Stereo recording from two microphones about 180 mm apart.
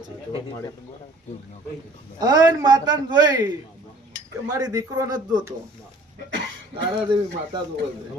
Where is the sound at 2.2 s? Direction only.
20° right (ahead or behind).